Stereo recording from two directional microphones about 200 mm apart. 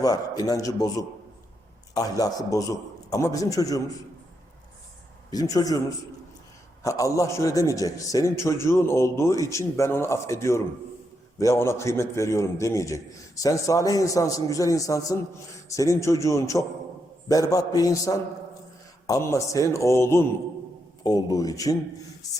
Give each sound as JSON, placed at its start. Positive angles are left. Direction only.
{"t": 0.0, "sound": "a man's voice", "side_deg": 20}
{"t": 5.3, "sound": "a man's voice", "side_deg": 20}
{"t": 6.8, "sound": "a man's voice", "side_deg": 15}